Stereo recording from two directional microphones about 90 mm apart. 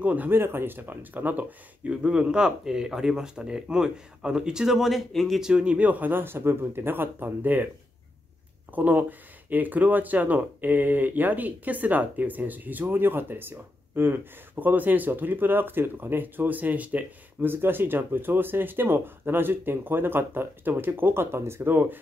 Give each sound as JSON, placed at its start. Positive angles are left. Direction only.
{"t": 0.0, "sound": "speech", "side_deg": -20}
{"t": 5.5, "sound": "speech", "side_deg": -10}
{"t": 8.7, "sound": "speech", "side_deg": -20}